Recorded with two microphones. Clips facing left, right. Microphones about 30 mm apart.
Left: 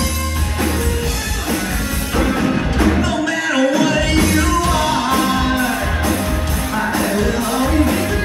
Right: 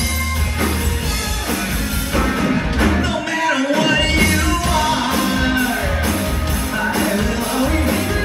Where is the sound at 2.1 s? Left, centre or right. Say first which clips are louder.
Left 1 dB; centre.